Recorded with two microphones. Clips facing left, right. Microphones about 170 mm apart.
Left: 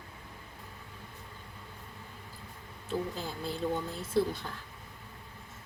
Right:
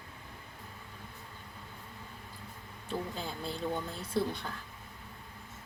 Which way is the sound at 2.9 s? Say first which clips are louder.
Left 2 dB; centre (ahead or behind).